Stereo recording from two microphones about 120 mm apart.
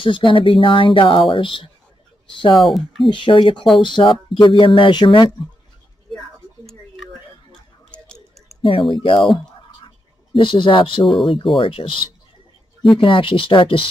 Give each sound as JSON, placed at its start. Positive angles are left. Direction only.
{"t": 0.0, "sound": "speech", "side_deg": 45}
{"t": 2.5, "sound": "speech", "side_deg": 0}
{"t": 3.1, "sound": "speech", "side_deg": 45}
{"t": 6.1, "sound": "a sound", "side_deg": 0}
{"t": 8.6, "sound": "speech", "side_deg": 45}
{"t": 9.8, "sound": "a sound", "side_deg": 45}
{"t": 11.5, "sound": "speech", "side_deg": 45}